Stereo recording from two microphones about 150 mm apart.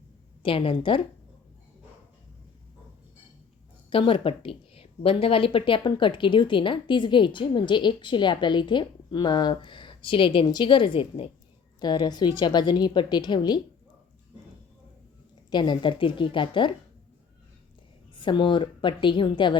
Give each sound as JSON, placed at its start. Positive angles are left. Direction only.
{"t": 0.4, "sound": "speech", "side_deg": 35}
{"t": 3.8, "sound": "a woman's voice", "side_deg": 35}
{"t": 15.4, "sound": "speech", "side_deg": 30}
{"t": 18.1, "sound": "speech", "side_deg": 35}